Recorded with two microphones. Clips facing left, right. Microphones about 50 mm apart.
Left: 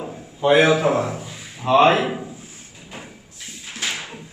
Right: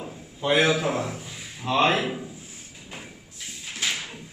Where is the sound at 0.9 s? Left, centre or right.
Left.